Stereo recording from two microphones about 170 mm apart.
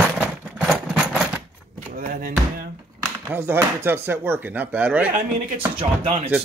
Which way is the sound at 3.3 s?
10° right (ahead or behind).